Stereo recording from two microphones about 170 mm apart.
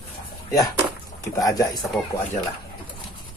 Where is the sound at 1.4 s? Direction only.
20° left (ahead or behind).